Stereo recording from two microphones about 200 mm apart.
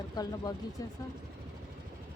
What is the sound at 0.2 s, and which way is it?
Speech, 20° left (ahead or behind).